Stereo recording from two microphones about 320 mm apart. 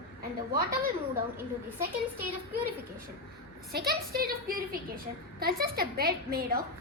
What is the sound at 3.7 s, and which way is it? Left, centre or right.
A woman's voice, right.